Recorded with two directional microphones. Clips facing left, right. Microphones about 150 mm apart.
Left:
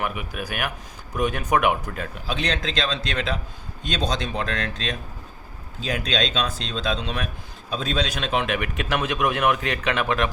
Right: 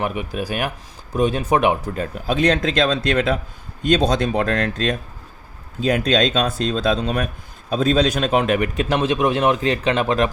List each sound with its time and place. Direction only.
0.0 s a man's voice: 30° right (ahead or behind)
2.2 s a man's voice: 50° right (ahead or behind); by 10.2 s 35° right (ahead or behind)